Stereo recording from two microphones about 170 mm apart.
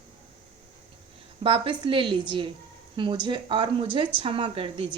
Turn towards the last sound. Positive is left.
turn(degrees=-30)  # may be behind; listen again after turning